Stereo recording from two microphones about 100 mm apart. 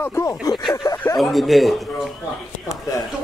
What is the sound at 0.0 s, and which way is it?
Speech, 25° left (ahead or behind).